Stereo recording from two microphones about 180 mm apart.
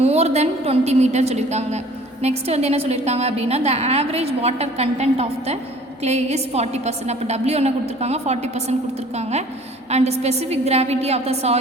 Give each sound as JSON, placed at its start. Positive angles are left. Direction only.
{"t": 0.0, "sound": "a woman's voice", "side_deg": -35}
{"t": 9.9, "sound": "a woman's voice", "side_deg": -35}